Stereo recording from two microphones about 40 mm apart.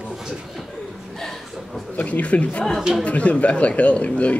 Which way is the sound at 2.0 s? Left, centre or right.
Left.